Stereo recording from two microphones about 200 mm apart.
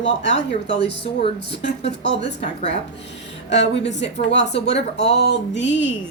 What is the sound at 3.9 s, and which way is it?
A woman's voice, 35° left (ahead or behind).